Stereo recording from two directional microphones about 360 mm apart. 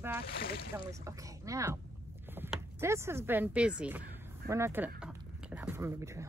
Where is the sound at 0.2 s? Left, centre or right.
Left.